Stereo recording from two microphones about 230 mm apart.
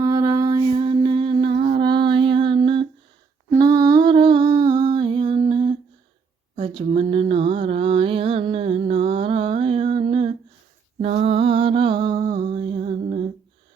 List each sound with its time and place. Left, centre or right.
0.0 s mantra: centre
1.3 s humming: right
1.8 s music: centre
3.5 s lullaby: centre
6.8 s a sound: right
11.0 s mantra: right
12.3 s music: right
12.5 s music: right